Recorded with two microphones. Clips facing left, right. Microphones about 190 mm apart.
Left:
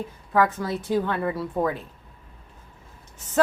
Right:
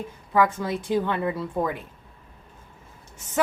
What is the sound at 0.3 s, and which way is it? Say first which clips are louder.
Speech: even; 15° right (ahead or behind).